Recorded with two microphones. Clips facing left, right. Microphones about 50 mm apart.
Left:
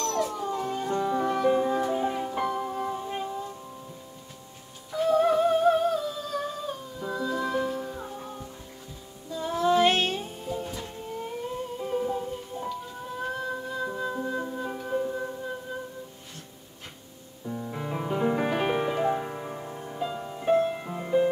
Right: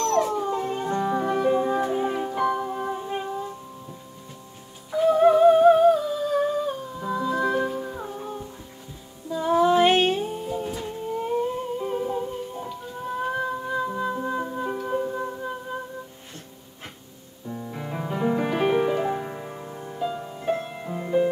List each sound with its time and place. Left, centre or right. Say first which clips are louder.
0.0 s howl: right 6 dB; right
0.5 s music: right 3 dB; right
4.9 s humming: right 5 dB; centre
9.3 s music: right 5 dB; centre
17.5 s music: even; centre